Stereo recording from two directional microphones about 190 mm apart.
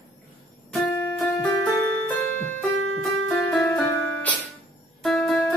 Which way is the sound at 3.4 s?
5° left (ahead or behind).